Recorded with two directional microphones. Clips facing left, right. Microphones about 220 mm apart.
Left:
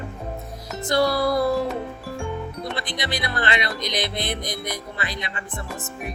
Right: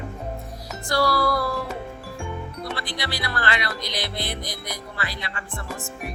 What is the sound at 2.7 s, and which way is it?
Speech, 20° left (ahead or behind).